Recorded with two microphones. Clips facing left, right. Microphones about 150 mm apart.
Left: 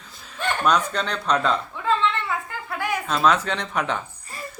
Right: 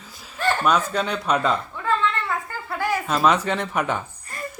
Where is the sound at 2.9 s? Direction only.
5° right (ahead or behind).